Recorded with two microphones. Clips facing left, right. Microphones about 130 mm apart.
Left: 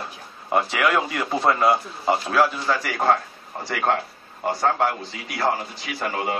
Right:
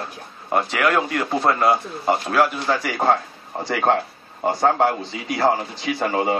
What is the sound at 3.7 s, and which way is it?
Speech, 35° right (ahead or behind).